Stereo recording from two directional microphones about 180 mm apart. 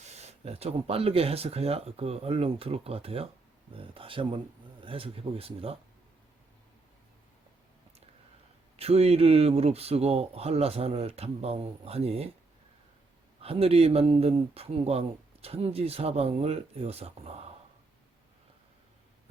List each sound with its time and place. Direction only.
0.0 s speech: 35° right (ahead or behind)
8.7 s speech: 35° right (ahead or behind)
13.4 s speech: 35° right (ahead or behind)